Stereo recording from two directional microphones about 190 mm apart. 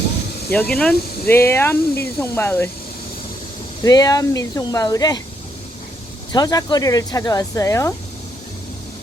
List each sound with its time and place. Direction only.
0.5 s speech: 5° left (ahead or behind)
3.8 s speech: 20° left (ahead or behind)
6.3 s speech: 20° left (ahead or behind)